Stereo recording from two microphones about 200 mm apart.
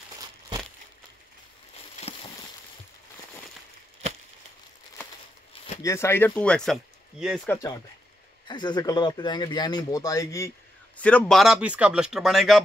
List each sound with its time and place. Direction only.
2.1 s a sound: 30° left (ahead or behind)
5.8 s speech: 15° left (ahead or behind)
7.4 s speech: 15° left (ahead or behind); by 12.6 s centre (ahead or behind)